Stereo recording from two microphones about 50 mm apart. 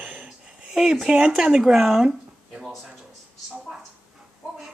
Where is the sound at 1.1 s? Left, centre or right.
Centre.